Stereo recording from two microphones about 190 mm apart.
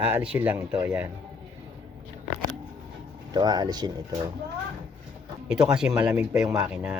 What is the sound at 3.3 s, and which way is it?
Speech, 20° right (ahead or behind).